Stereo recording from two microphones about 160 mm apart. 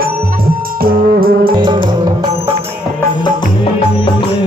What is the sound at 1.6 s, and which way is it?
Music, 30° right (ahead or behind).